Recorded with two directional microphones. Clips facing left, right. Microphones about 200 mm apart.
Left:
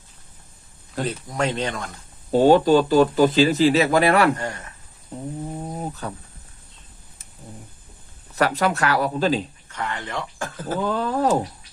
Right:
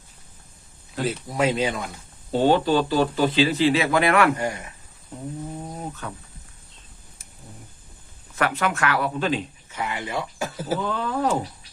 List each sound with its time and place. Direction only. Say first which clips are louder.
1.0 s speech: right 2 dB; 5° right (ahead or behind)
2.3 s speech: left 5 dB; 45° left (ahead or behind)
4.4 s speech: right 3 dB; 10° right (ahead or behind)
6.0 s speech: left 3 dB; 35° left (ahead or behind)
8.4 s speech: left 3 dB; 35° left (ahead or behind)
9.6 s speech: even; 10° right (ahead or behind)
10.8 s speech: left 6 dB; 40° left (ahead or behind)